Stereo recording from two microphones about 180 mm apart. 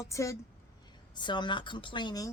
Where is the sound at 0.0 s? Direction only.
15° left (ahead or behind).